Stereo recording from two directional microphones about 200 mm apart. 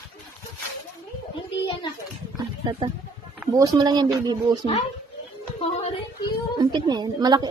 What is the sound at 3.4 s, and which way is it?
A woman's voice, 20° right (ahead or behind).